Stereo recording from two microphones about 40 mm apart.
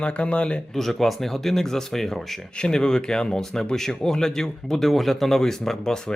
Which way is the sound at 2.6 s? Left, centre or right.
Centre.